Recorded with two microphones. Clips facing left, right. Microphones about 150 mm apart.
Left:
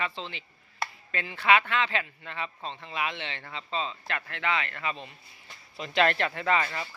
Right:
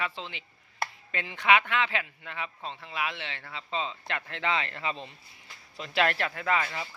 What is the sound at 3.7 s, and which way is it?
Speech, 20° right (ahead or behind).